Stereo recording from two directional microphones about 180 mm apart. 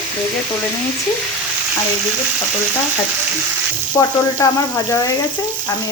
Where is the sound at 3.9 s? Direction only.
20° left (ahead or behind).